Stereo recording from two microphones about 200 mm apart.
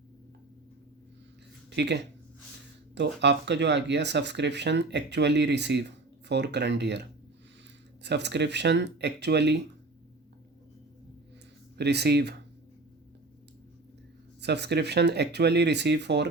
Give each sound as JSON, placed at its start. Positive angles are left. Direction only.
{"t": 1.7, "sound": "speech", "side_deg": -60}
{"t": 11.8, "sound": "speech", "side_deg": -55}
{"t": 14.4, "sound": "speech", "side_deg": -55}